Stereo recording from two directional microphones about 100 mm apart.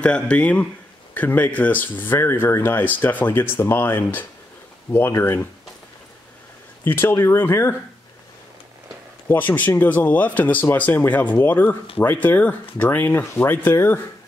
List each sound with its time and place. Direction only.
0.0 s speech: 10° left (ahead or behind)
6.8 s speech: 20° left (ahead or behind)
9.3 s speech: 20° left (ahead or behind)